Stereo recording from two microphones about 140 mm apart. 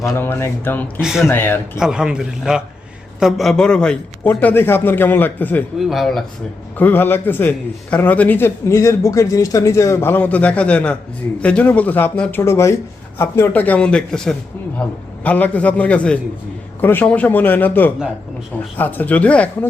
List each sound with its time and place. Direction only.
0.0 s a man's voice: 20° left (ahead or behind)
1.8 s a man's voice: 5° right (ahead or behind); by 5.6 s 10° left (ahead or behind)
5.8 s a man's voice: centre (ahead or behind)
6.7 s a man's voice: 15° left (ahead or behind)